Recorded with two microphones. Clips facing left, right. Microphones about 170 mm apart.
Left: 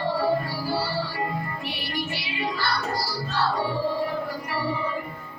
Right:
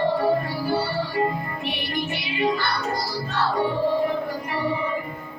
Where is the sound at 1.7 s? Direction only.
20° right (ahead or behind).